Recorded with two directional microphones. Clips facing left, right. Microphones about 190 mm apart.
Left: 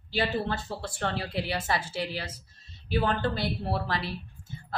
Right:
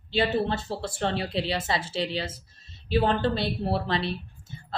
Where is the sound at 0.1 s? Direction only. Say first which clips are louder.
Right 4 dB; 25° right (ahead or behind).